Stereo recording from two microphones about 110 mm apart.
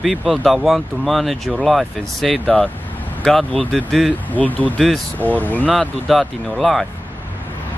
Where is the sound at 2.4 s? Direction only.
10° left (ahead or behind).